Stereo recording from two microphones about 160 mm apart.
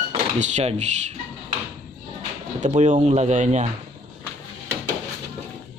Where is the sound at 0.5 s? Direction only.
45° right (ahead or behind).